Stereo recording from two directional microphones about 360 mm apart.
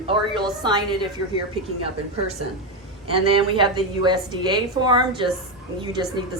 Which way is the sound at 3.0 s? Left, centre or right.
Centre.